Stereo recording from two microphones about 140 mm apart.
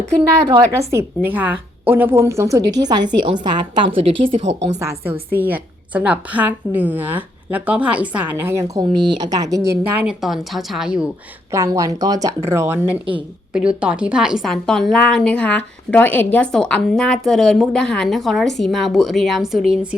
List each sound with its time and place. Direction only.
0.7 s a woman's voice: 20° right (ahead or behind)
4.0 s a woman's voice: 45° right (ahead or behind)
4.8 s a woman's voice: 20° right (ahead or behind)
9.9 s a woman's voice: 10° right (ahead or behind)
11.5 s a woman's voice: 25° right (ahead or behind)
13.5 s a woman's voice: 5° right (ahead or behind)